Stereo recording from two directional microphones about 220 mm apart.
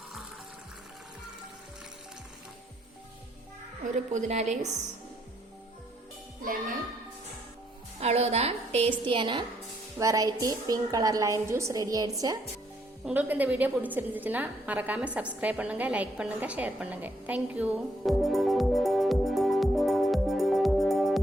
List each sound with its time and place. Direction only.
3.9 s a woman's voice: 35° right (ahead or behind)
7.9 s a woman's voice: 30° right (ahead or behind); by 21.2 s centre (ahead or behind)